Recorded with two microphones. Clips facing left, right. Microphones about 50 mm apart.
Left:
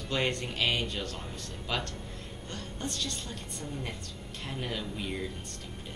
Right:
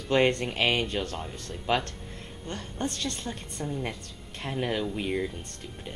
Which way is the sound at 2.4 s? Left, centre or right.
Right.